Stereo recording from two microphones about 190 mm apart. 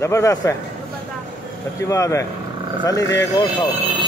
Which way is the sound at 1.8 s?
15° left (ahead or behind).